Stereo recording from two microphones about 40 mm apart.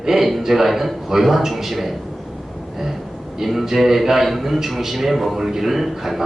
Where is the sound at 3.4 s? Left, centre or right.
Centre.